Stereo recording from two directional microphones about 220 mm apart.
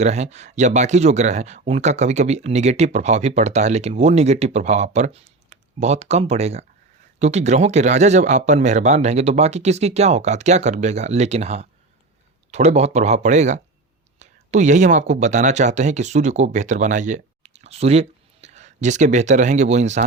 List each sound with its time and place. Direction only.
0.0 s speech: 30° right (ahead or behind)